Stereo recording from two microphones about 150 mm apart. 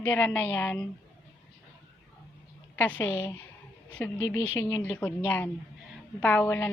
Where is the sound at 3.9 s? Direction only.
10° left (ahead or behind).